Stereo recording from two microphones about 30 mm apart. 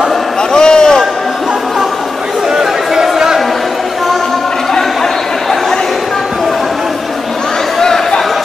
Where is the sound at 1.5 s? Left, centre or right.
Centre.